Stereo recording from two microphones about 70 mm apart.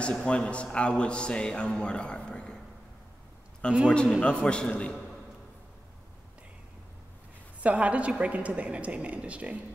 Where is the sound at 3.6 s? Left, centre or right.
Centre.